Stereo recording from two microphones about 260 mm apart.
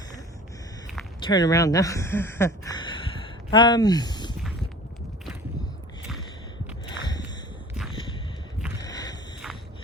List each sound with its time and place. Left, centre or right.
1.3 s speech: centre
6.9 s walk: centre
8.9 s a sound: centre